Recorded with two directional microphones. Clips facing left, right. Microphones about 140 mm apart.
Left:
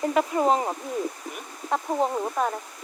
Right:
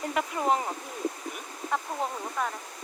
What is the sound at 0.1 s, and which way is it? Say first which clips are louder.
Speech: left 6 dB; 35° left (ahead or behind).